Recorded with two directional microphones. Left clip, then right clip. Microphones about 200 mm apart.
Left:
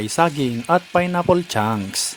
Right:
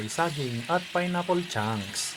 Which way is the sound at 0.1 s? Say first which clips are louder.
Left 10 dB; 50° left (ahead or behind).